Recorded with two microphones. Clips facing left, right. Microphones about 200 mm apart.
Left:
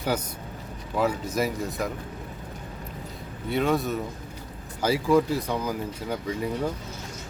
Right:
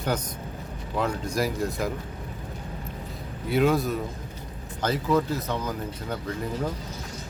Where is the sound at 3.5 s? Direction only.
Centre (ahead or behind).